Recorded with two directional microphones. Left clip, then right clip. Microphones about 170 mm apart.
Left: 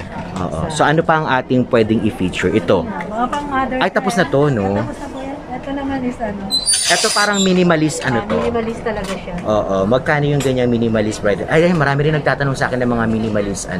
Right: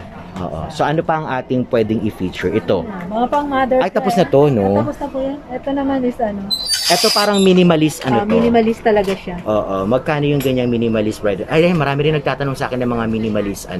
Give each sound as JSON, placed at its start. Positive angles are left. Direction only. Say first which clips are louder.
{"t": 0.7, "sound": "speech", "louder": "left 3 dB", "side_deg": 0}
{"t": 6.9, "sound": "speech", "louder": "right 1 dB", "side_deg": -10}
{"t": 8.5, "sound": "speech", "louder": "right 7 dB", "side_deg": -60}
{"t": 9.5, "sound": "speech", "louder": "left 1 dB", "side_deg": -5}